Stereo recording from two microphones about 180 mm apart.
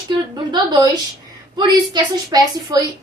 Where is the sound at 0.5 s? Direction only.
25° right (ahead or behind).